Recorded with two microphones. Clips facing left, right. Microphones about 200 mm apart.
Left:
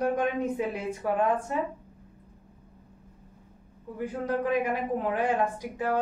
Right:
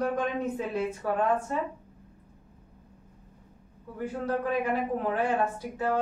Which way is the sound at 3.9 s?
15° left (ahead or behind).